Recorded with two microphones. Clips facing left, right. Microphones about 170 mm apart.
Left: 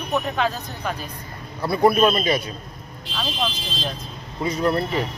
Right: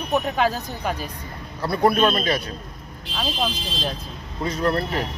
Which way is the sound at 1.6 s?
10° left (ahead or behind).